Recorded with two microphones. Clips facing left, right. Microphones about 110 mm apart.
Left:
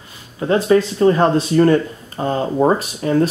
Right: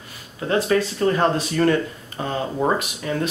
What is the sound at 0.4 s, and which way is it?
Speech, 25° left (ahead or behind).